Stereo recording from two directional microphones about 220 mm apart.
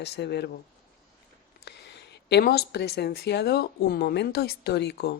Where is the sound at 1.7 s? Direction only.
50° left (ahead or behind).